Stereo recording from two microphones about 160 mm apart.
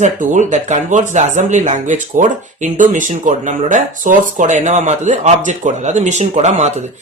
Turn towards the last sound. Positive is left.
turn(degrees=-45)  # may be behind; listen again after turning